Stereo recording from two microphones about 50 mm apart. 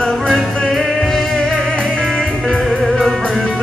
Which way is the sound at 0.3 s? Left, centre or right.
Centre.